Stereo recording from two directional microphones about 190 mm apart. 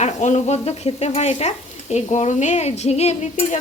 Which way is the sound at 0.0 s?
40° left (ahead or behind).